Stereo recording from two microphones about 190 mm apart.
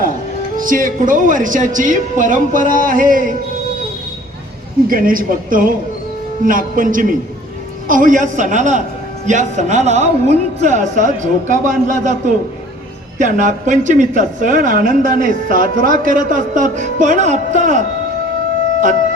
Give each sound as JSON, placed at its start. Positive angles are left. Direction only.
{"t": 0.5, "sound": "speech", "side_deg": -45}
{"t": 4.9, "sound": "speech", "side_deg": -50}
{"t": 13.1, "sound": "speech", "side_deg": -40}